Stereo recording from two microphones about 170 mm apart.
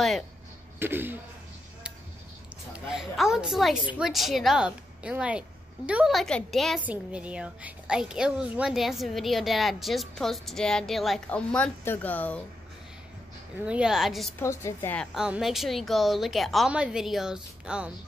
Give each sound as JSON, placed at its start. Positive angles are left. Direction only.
{"t": 0.7, "sound": "speech", "side_deg": -10}
{"t": 2.9, "sound": "a woman's voice", "side_deg": 0}
{"t": 13.7, "sound": "a woman's voice", "side_deg": -5}
{"t": 14.4, "sound": "a woman's voice", "side_deg": 15}
{"t": 15.1, "sound": "a woman's voice", "side_deg": -5}